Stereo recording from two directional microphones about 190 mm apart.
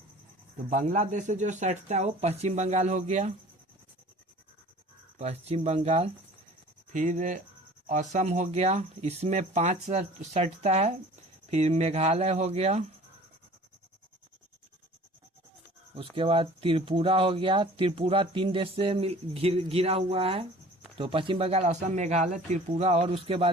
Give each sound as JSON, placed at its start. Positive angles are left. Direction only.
{"t": 0.7, "sound": "speech", "side_deg": -40}
{"t": 5.1, "sound": "speech", "side_deg": -35}
{"t": 16.0, "sound": "speech", "side_deg": -30}